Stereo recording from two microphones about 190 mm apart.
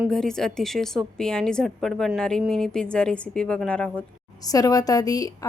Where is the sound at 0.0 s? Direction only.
5° left (ahead or behind).